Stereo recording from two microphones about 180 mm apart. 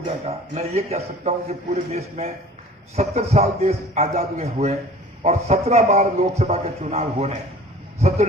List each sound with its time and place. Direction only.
0.3 s a man's voice: 35° right (ahead or behind)